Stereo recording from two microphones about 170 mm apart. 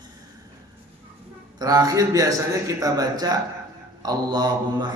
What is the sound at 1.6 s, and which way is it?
Mantra, 20° right (ahead or behind).